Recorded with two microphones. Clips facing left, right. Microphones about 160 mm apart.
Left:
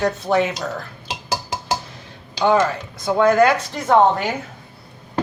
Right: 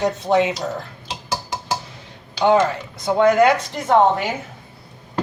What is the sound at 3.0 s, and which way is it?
Speech, 20° right (ahead or behind).